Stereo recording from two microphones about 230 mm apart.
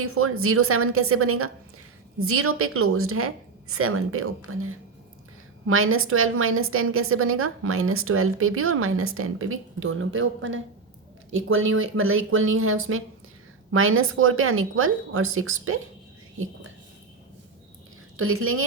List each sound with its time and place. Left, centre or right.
0.0 s a woman's voice: right
18.2 s a woman's voice: right